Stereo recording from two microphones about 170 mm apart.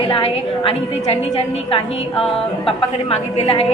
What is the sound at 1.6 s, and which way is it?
Speech, 30° left (ahead or behind).